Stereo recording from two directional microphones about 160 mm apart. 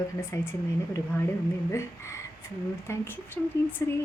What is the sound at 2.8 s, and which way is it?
Speech, 15° left (ahead or behind).